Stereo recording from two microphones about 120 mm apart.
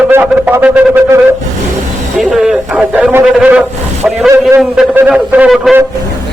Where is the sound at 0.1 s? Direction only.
15° right (ahead or behind).